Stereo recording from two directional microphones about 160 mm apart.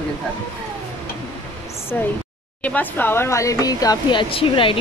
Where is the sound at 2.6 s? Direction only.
10° left (ahead or behind); by 4.8 s 35° left (ahead or behind).